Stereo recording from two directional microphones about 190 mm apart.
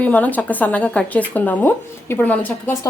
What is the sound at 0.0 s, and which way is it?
Speech, 10° left (ahead or behind).